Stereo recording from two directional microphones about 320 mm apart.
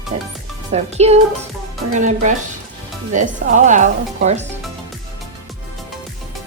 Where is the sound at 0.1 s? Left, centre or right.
Centre.